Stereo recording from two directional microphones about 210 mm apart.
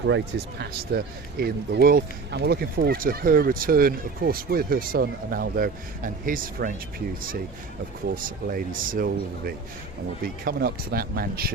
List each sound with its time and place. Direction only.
0.1 s speech: 50° right (ahead or behind)